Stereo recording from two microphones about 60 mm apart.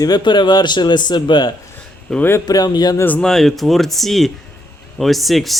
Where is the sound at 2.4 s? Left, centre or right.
Left.